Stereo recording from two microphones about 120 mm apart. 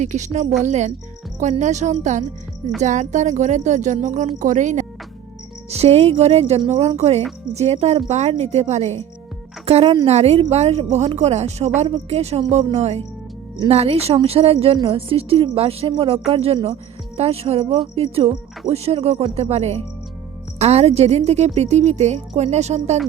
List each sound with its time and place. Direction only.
0.0 s speech: 80° right
5.7 s a woman's voice: 60° right (ahead or behind)
9.6 s speech: 50° right (ahead or behind)
10.1 s a woman's voice: 60° right (ahead or behind)